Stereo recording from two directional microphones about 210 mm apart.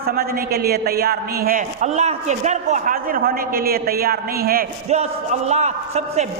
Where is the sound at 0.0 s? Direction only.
45° right (ahead or behind).